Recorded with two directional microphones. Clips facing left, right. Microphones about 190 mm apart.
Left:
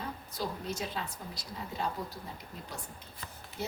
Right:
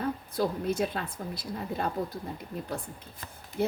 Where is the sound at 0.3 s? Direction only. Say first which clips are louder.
Right 8 dB; 55° right (ahead or behind).